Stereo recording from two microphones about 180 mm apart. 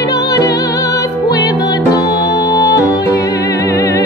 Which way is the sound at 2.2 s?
65° left (ahead or behind).